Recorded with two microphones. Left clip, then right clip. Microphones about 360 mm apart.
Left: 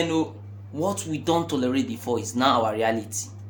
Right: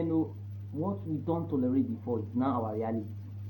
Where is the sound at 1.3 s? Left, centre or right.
Left.